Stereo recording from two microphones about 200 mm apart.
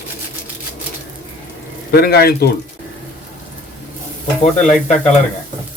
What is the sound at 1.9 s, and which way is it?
Speech, 50° left (ahead or behind).